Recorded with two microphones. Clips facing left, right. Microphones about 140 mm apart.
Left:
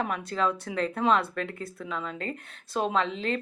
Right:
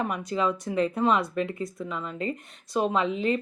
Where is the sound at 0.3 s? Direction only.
5° right (ahead or behind).